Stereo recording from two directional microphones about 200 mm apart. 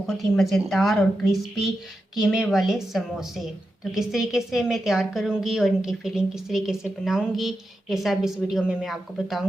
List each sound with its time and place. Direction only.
0.1 s a woman's voice: centre (ahead or behind)